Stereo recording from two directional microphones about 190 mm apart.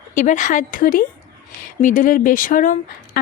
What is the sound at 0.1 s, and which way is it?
A woman's voice, 40° left (ahead or behind).